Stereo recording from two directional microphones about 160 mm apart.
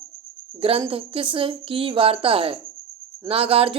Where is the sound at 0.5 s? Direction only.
35° right (ahead or behind).